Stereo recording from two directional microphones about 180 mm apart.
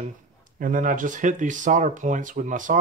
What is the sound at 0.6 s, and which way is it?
Speech, 45° right (ahead or behind).